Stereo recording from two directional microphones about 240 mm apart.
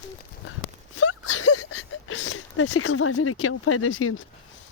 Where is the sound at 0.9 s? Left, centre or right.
Left.